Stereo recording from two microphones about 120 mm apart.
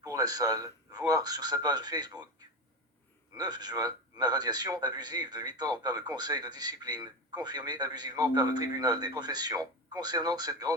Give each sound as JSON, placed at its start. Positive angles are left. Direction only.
{"t": 0.0, "sound": "speech", "side_deg": -30}
{"t": 3.3, "sound": "speech", "side_deg": -35}